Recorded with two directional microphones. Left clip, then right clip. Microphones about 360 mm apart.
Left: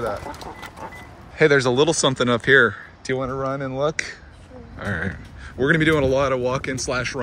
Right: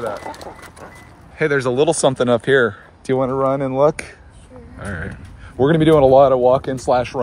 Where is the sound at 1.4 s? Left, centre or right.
Centre.